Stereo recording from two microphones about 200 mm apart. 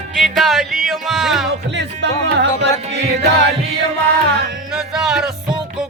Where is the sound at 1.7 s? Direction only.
60° right (ahead or behind).